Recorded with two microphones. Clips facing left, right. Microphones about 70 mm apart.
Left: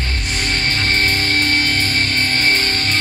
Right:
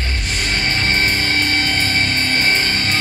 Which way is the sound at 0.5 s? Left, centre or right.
Right.